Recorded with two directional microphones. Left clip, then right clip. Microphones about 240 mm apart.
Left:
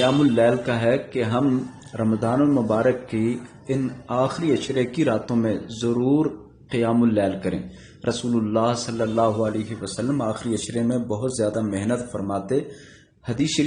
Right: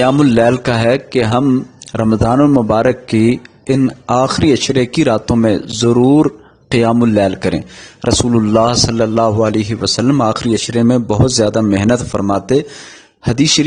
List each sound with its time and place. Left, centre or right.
0.0 s a man's voice: right